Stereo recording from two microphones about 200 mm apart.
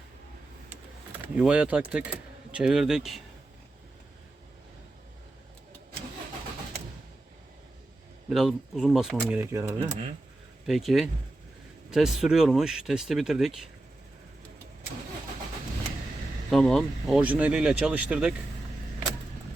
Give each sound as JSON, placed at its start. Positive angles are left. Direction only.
{"t": 1.2, "sound": "speech", "side_deg": -5}
{"t": 8.3, "sound": "speech", "side_deg": 0}
{"t": 9.7, "sound": "speech", "side_deg": -30}
{"t": 10.7, "sound": "speech", "side_deg": 0}
{"t": 16.5, "sound": "speech", "side_deg": 0}